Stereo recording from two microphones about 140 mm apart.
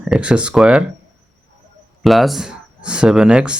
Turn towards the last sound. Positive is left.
turn(degrees=-5)  # may be behind; listen again after turning